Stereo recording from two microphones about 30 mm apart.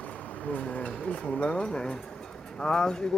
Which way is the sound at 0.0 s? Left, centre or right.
Left.